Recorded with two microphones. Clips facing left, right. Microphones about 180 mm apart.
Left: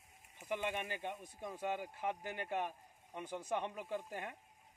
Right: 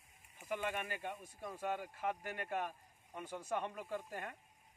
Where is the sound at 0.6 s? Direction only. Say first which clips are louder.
Even; 25° left (ahead or behind).